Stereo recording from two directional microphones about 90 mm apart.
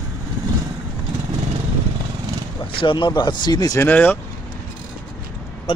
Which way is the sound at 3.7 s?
20° left (ahead or behind).